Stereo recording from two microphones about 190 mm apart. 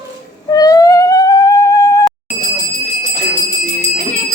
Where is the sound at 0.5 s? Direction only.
20° left (ahead or behind).